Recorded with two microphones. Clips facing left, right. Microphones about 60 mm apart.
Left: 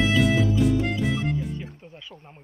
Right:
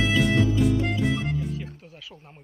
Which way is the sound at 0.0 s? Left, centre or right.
Centre.